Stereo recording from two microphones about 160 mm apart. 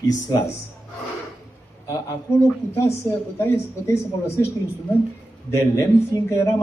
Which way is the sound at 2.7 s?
15° left (ahead or behind).